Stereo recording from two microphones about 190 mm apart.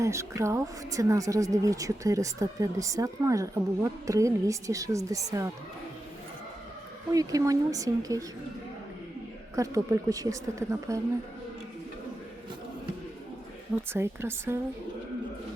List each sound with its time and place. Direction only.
0.0 s speech: 15° right (ahead or behind)
7.1 s speech: 20° right (ahead or behind)
9.6 s speech: 15° right (ahead or behind)
13.9 s speech: 15° right (ahead or behind)